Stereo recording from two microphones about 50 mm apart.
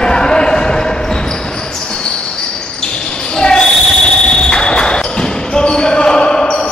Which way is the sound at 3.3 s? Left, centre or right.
Centre.